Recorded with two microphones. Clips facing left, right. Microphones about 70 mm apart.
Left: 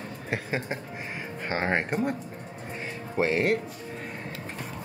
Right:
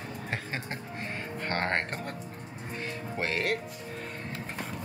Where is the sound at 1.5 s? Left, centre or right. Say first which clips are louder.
Left 3 dB; centre.